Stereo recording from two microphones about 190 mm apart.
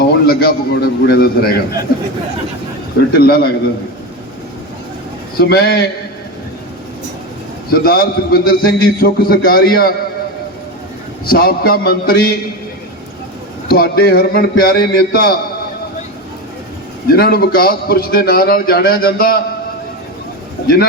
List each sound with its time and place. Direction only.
0.0 s a man's voice: 55° left (ahead or behind)
3.1 s a man's voice: 55° left (ahead or behind)
5.4 s a man's voice: 55° left (ahead or behind)
7.7 s a man's voice: 55° left (ahead or behind)
11.3 s a man's voice: 50° left (ahead or behind)
13.7 s a man's voice: 55° left (ahead or behind)
17.1 s a man's voice: 55° left (ahead or behind)